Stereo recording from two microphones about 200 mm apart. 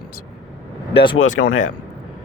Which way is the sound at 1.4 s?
70° left (ahead or behind).